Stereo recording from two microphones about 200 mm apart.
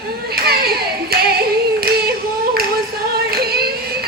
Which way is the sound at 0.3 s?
50° right (ahead or behind).